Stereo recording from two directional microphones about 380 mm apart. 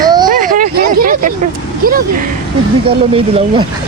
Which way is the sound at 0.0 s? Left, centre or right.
Centre.